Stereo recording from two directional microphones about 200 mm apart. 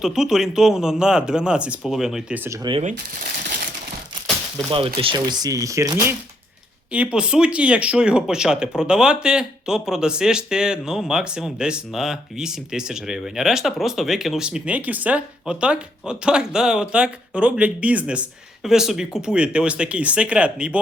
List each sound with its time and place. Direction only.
0.0 s speech: centre (ahead or behind)
4.5 s speech: 25° right (ahead or behind)
6.9 s speech: 5° right (ahead or behind)